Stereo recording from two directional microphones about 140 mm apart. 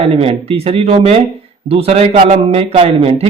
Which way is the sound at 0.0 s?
45° right (ahead or behind).